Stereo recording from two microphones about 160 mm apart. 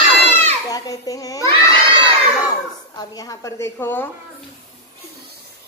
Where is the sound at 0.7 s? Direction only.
20° left (ahead or behind).